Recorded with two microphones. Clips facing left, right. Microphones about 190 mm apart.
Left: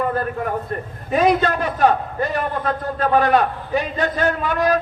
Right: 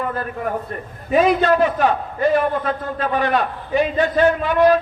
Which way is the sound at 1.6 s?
40° left (ahead or behind).